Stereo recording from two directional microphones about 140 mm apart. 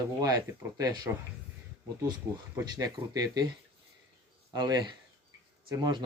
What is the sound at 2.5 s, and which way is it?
Speech, 25° right (ahead or behind).